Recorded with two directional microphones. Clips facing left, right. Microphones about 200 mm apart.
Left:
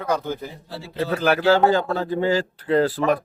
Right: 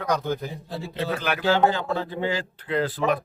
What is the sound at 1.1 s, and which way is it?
Speech, 40° left (ahead or behind).